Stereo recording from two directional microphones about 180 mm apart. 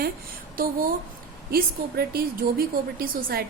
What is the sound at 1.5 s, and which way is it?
A woman's voice, 60° right (ahead or behind).